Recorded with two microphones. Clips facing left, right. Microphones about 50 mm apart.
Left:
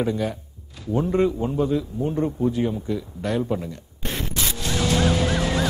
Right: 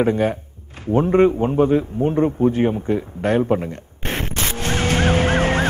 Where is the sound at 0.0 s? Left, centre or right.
Right.